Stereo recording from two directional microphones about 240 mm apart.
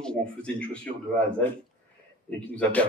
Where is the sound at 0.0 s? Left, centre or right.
Centre.